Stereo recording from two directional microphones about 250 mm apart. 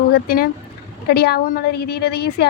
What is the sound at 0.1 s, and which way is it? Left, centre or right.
A woman's voice, left.